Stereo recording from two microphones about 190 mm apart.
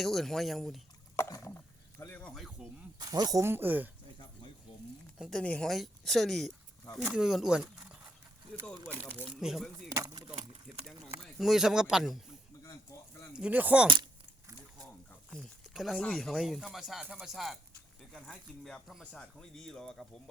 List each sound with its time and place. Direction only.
0.0 s speech: centre (ahead or behind)
1.1 s speech: 15° left (ahead or behind)
3.0 s speech: 20° right (ahead or behind)
5.1 s speech: centre (ahead or behind)
8.7 s speech: 20° right (ahead or behind)
9.1 s speech: 5° right (ahead or behind)
9.9 s a sound: 20° right (ahead or behind)
10.7 s a sound: centre (ahead or behind)
11.3 s speech: centre (ahead or behind)
13.3 s speech: 5° right (ahead or behind)
15.3 s speech: centre (ahead or behind)